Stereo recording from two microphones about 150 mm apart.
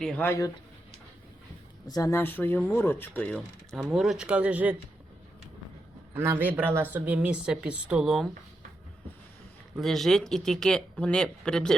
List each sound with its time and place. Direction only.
0.2 s speech: 20° left (ahead or behind)
1.9 s speech: 20° left (ahead or behind); by 4.8 s 10° right (ahead or behind)
6.1 s speech: 15° right (ahead or behind)
9.7 s speech: centre (ahead or behind)